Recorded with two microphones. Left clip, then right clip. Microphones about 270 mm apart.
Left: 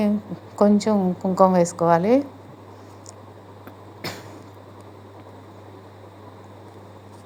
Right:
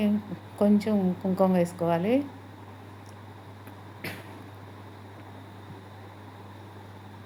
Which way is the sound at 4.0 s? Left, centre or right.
Centre.